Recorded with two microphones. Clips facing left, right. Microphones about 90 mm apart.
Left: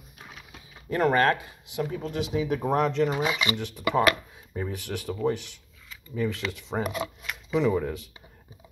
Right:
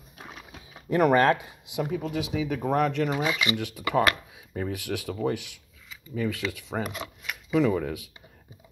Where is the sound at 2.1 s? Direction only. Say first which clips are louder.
Left 5 dB; centre (ahead or behind).